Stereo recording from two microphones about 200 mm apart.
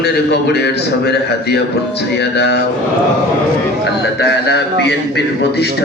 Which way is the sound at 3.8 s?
55° left (ahead or behind).